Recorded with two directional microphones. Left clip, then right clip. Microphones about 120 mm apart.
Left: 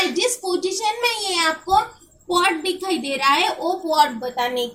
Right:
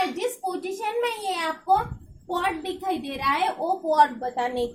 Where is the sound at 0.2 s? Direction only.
70° right (ahead or behind).